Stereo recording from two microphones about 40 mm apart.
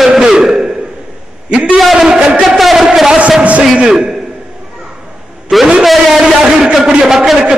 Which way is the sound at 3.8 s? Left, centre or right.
Centre.